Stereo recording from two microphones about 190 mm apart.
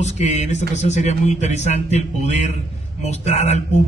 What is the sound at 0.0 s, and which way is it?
A man's voice, 35° left (ahead or behind).